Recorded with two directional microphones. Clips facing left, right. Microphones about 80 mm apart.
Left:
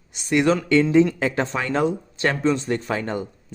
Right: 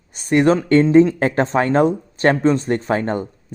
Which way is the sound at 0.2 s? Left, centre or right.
Right.